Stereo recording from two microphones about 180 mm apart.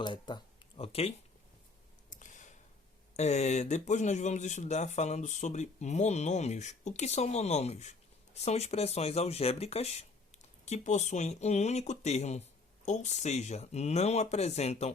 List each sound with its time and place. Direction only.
0.0 s speech: 25° left (ahead or behind)
2.0 s a sound: 45° left (ahead or behind)
3.2 s speech: 40° left (ahead or behind)